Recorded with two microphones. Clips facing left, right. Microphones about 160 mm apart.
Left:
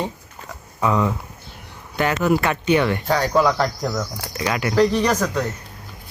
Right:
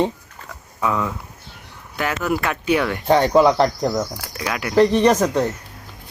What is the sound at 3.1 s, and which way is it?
Speech, 25° right (ahead or behind).